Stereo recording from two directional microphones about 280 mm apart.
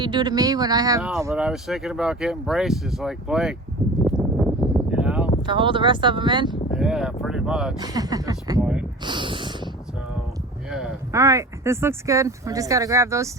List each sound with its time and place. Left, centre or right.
0.0 s speech: centre
3.8 s a sound: centre
5.5 s speech: centre
6.7 s speech: centre
7.8 s speech: centre
9.0 s speech: centre
10.7 s speech: centre